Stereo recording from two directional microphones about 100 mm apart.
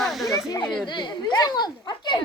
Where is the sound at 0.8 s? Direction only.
50° left (ahead or behind).